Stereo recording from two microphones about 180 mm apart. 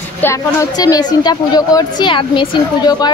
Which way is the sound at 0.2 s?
15° left (ahead or behind).